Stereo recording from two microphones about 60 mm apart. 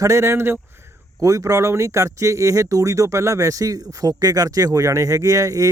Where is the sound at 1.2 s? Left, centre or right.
Right.